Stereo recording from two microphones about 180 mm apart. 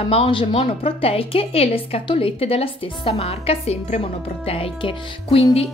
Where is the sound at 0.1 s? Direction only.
30° left (ahead or behind).